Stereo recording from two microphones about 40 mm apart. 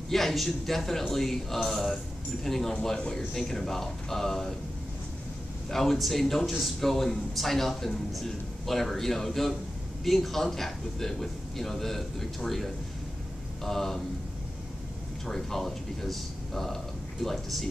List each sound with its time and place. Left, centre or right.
0.1 s a man's voice: centre; by 3.3 s left
3.3 s a man's voice: centre
5.7 s a man's voice: centre
15.2 s a man's voice: centre